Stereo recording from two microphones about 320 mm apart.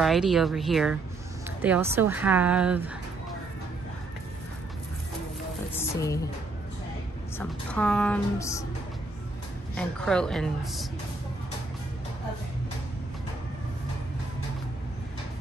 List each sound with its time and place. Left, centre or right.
0.0 s a woman's voice: centre
5.8 s speech: centre
7.3 s a woman's voice: centre
9.8 s a woman's voice: centre